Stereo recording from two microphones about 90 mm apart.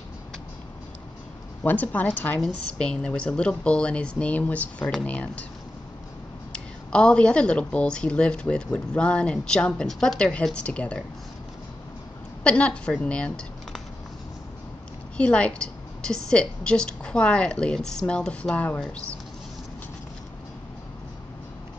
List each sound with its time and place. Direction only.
1.6 s a woman's voice: 15° left (ahead or behind)
6.5 s a woman's voice: 10° left (ahead or behind)
12.4 s a woman's voice: 15° left (ahead or behind)
15.1 s a woman's voice: 15° left (ahead or behind)